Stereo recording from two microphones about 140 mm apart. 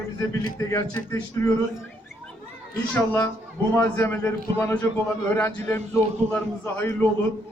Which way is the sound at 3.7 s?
20° left (ahead or behind).